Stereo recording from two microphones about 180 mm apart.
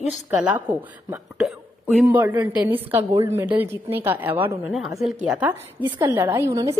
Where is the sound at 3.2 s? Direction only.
10° right (ahead or behind).